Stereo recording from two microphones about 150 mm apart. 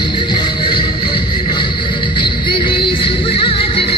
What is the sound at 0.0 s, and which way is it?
Music, 30° left (ahead or behind).